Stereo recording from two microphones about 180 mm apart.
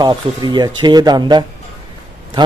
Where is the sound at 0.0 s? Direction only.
25° right (ahead or behind).